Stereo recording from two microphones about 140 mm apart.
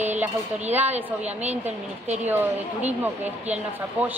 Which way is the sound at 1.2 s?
50° right (ahead or behind).